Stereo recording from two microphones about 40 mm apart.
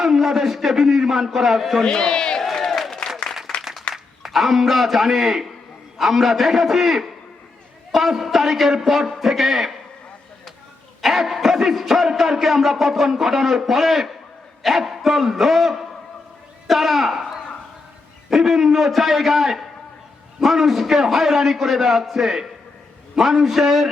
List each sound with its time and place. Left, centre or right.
0.0 s a man's voice: centre
1.8 s a man's voice: centre
2.6 s applause: centre
3.6 s a sound: centre
3.9 s a man's voice: centre
11.0 s a man's voice: centre
18.3 s a man's voice: centre